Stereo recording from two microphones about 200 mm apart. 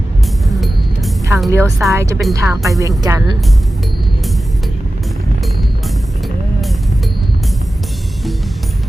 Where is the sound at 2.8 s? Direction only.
15° right (ahead or behind).